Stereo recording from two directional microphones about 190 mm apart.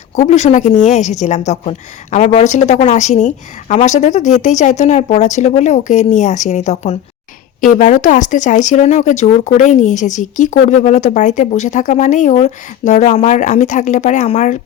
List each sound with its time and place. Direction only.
0.2 s speech: 35° left (ahead or behind)